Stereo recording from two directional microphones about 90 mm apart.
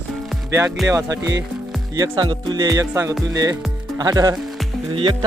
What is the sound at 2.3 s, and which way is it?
Music, 55° right (ahead or behind).